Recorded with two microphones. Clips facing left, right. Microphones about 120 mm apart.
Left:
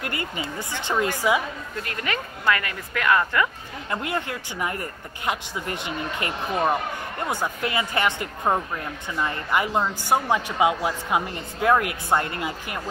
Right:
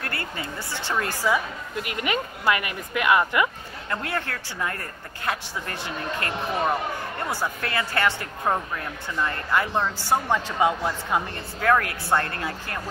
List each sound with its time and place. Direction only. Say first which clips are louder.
0.0 s a woman's voice: left 2 dB; 15° left (ahead or behind)
1.8 s speech: right 3 dB; 20° right (ahead or behind)
3.9 s speech: left 1 dB; 15° left (ahead or behind)